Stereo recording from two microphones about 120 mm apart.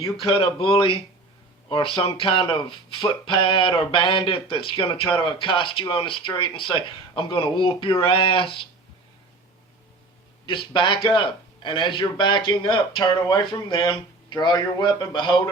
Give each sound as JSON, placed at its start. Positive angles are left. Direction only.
{"t": 0.2, "sound": "speech", "side_deg": 50}
{"t": 10.4, "sound": "a man's voice", "side_deg": 45}